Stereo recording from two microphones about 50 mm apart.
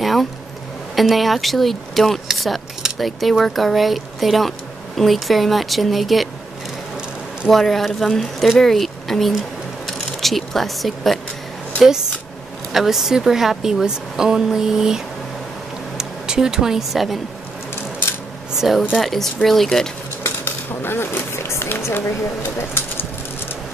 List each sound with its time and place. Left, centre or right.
0.0 s a sound: centre
0.9 s speech: centre
7.5 s speech: centre
12.7 s a woman's voice: centre
16.0 s speech: centre
18.6 s a woman's voice: centre
20.8 s speech: left